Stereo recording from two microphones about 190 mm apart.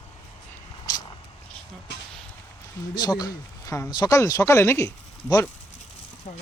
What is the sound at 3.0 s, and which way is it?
A man's voice, 20° left (ahead or behind).